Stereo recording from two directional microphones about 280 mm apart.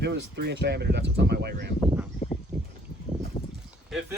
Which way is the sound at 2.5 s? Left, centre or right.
Centre.